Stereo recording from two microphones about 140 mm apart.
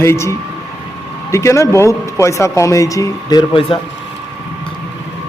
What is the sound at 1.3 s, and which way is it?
Speech, 20° left (ahead or behind).